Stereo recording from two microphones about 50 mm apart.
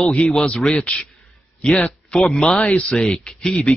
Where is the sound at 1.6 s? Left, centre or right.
Left.